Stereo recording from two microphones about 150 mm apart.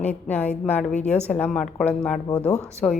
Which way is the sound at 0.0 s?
10° left (ahead or behind).